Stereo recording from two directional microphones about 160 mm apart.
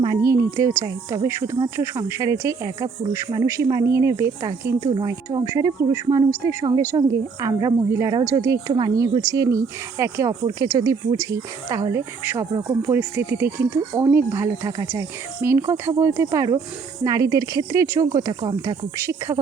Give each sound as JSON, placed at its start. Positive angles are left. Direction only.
{"t": 0.0, "sound": "speech", "side_deg": -20}
{"t": 13.0, "sound": "speech", "side_deg": -10}